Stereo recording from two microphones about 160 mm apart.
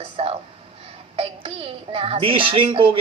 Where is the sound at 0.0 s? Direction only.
40° right (ahead or behind).